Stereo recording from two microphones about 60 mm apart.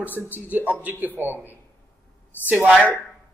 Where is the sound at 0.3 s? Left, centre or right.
Right.